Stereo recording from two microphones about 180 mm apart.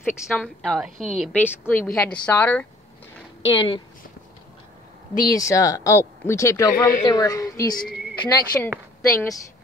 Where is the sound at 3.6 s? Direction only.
25° left (ahead or behind).